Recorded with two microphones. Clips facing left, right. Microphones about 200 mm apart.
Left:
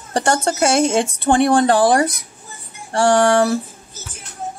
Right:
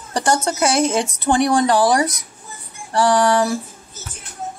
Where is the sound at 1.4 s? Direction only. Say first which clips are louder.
Left 2 dB; 55° left (ahead or behind).